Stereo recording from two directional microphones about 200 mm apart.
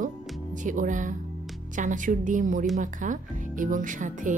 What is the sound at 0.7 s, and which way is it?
Speech, 40° right (ahead or behind).